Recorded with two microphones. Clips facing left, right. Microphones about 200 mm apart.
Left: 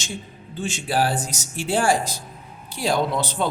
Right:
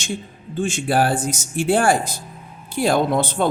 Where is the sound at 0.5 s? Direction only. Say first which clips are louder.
Right 5 dB; 50° right (ahead or behind).